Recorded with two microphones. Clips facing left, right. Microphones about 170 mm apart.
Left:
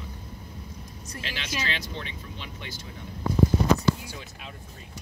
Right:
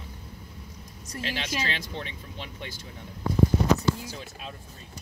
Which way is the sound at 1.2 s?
40° right (ahead or behind).